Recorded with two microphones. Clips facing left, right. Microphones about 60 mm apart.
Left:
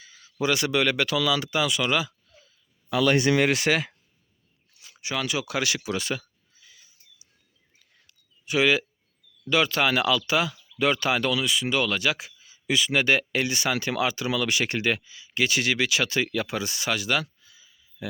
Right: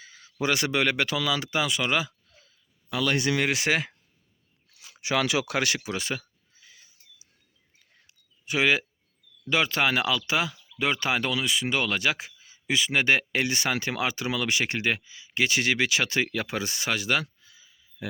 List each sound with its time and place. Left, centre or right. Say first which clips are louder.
0.0 s speech: left 2 dB; right
3.5 s speech: left 2 dB; centre
4.9 s speech: right 3 dB; right
5.8 s speech: left 2 dB; right
8.0 s a sound: even; right
9.5 s speech: left 2 dB; right